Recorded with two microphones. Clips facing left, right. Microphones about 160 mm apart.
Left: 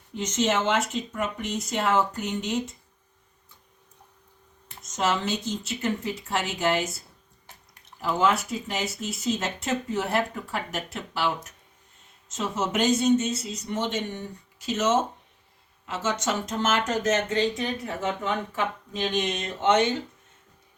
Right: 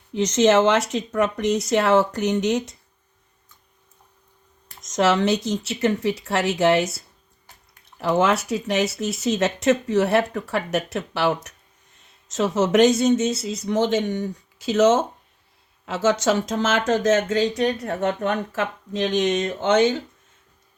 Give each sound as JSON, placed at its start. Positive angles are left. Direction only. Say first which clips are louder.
{"t": 0.1, "sound": "speech", "louder": "right 8 dB", "side_deg": -90}
{"t": 4.8, "sound": "speech", "louder": "right 7 dB", "side_deg": -85}
{"t": 19.1, "sound": "speech", "louder": "right 7 dB", "side_deg": -90}